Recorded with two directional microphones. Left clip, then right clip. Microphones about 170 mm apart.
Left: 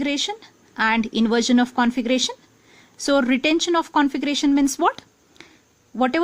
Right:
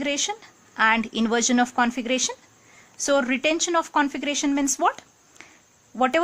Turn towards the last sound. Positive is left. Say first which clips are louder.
# left 1 dB
turn(degrees=25)  # may be behind; listen again after turning